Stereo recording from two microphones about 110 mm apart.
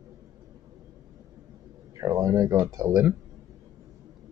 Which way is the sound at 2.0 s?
30° right (ahead or behind).